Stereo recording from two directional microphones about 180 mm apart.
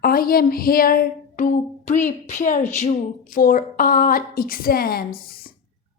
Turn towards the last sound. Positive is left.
turn(degrees=55)  # may be behind; listen again after turning